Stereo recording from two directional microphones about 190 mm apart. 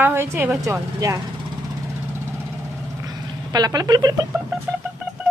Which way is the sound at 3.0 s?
20° right (ahead or behind).